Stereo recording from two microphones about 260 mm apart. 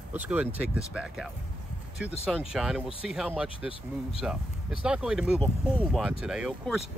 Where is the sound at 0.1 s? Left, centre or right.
Centre.